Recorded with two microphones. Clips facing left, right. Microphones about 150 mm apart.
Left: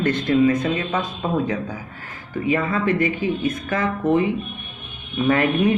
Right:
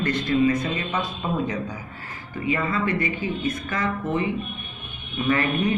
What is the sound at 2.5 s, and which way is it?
Speech, 55° left (ahead or behind).